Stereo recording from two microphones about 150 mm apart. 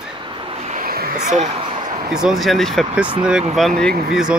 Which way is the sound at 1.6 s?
35° right (ahead or behind).